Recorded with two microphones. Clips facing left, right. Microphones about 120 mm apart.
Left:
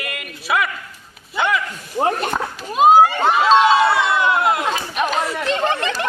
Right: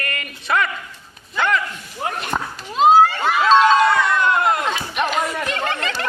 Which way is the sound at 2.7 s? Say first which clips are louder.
Left 1 dB; 15° left (ahead or behind).